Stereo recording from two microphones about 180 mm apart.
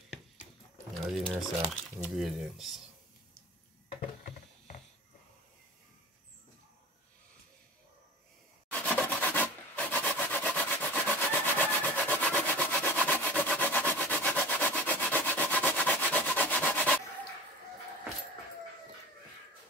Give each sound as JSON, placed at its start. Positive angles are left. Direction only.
{"t": 1.1, "sound": "speech", "side_deg": 0}
{"t": 4.2, "sound": "patter", "side_deg": 45}
{"t": 8.7, "sound": "rub", "side_deg": 10}